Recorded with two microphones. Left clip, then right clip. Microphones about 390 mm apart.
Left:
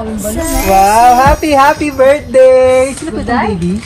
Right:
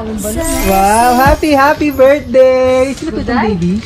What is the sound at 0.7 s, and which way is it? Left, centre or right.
Speech, left.